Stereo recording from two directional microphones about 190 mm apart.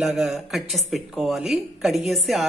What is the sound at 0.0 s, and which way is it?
Speech, centre (ahead or behind).